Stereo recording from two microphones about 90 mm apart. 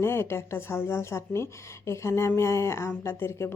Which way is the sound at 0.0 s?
25° left (ahead or behind).